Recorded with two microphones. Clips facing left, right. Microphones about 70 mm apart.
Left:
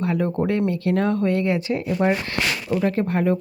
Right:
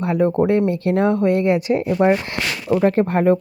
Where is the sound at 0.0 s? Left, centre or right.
Right.